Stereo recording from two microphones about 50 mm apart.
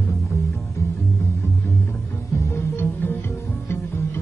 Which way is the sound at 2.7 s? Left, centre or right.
Left.